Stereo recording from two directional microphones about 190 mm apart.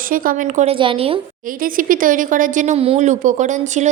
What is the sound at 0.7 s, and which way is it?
Speech, 30° right (ahead or behind).